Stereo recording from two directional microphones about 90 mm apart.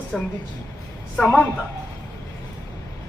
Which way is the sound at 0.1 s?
5° left (ahead or behind).